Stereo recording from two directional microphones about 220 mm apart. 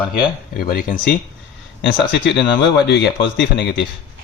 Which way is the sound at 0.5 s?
40° left (ahead or behind).